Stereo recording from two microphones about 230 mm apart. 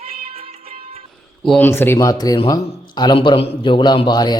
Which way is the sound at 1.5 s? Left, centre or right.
Centre.